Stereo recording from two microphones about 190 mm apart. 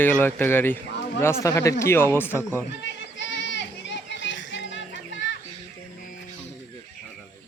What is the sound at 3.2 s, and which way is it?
Children playing, 70° left (ahead or behind).